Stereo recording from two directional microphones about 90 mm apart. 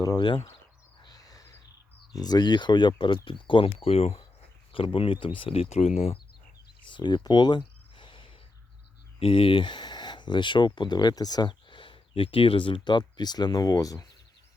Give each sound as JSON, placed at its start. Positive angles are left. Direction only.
{"t": 0.2, "sound": "speech", "side_deg": 60}
{"t": 1.0, "sound": "a sound", "side_deg": 45}
{"t": 2.1, "sound": "speech", "side_deg": 50}
{"t": 6.8, "sound": "cricket", "side_deg": 60}
{"t": 9.2, "sound": "speech", "side_deg": 90}